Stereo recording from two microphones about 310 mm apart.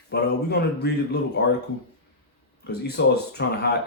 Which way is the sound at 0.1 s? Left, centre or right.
Left.